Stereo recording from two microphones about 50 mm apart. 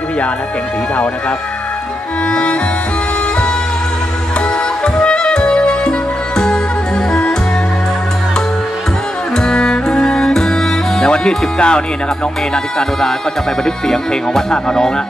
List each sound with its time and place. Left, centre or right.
4.8 s music: centre
9.4 s music: centre
13.7 s speech: centre